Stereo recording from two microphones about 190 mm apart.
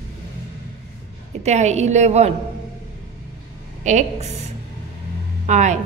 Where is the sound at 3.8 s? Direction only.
35° right (ahead or behind).